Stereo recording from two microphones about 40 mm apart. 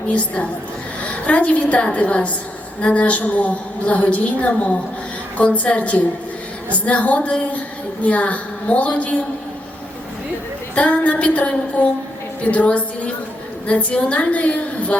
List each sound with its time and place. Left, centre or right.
0.1 s a woman's voice: left
10.8 s a woman's voice: left